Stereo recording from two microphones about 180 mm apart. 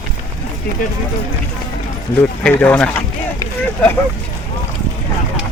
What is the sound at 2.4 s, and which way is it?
Speech, 5° left (ahead or behind).